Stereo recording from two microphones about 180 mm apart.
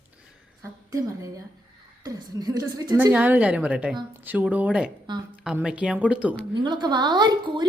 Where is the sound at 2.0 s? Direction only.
20° right (ahead or behind).